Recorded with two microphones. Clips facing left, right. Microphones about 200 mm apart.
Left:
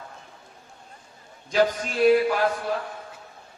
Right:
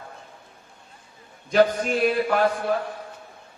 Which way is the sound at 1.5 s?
55° right (ahead or behind).